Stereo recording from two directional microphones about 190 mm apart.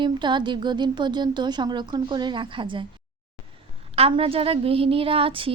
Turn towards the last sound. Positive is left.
turn(degrees=-30)  # may be behind; listen again after turning